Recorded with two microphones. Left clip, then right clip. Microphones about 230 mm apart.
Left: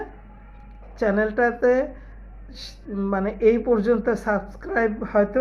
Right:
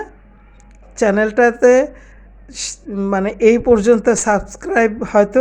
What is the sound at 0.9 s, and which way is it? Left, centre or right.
Speech, right.